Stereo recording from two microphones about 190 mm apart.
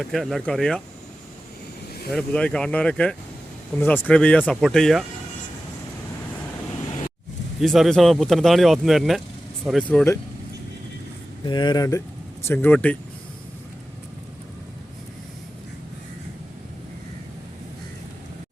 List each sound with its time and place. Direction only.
0.0 s speech: centre (ahead or behind)
2.1 s speech: 5° left (ahead or behind)
7.6 s speech: centre (ahead or behind)
11.4 s speech: 20° left (ahead or behind); by 13.0 s 5° left (ahead or behind)